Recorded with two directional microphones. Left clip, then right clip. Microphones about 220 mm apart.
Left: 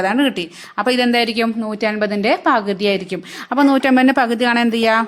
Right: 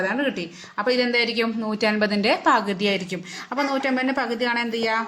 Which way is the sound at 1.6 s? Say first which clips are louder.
Left 3 dB; 20° left (ahead or behind).